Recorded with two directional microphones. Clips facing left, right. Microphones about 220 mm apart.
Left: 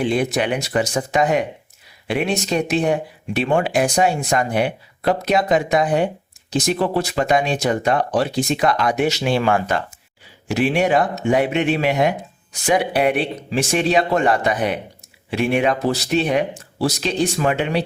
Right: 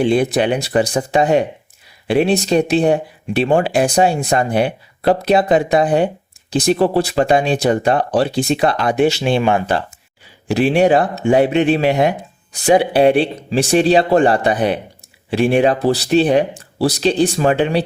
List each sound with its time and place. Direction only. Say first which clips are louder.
0.0 s speech: right 5 dB; 30° right (ahead or behind)